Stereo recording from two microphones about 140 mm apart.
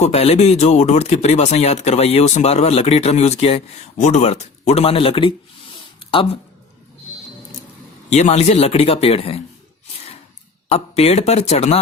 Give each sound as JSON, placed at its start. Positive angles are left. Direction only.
{"t": 0.0, "sound": "speech", "side_deg": 50}
{"t": 8.1, "sound": "speech", "side_deg": 50}
{"t": 10.7, "sound": "speech", "side_deg": 50}